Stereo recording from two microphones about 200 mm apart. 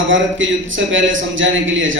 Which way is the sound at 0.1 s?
70° right (ahead or behind).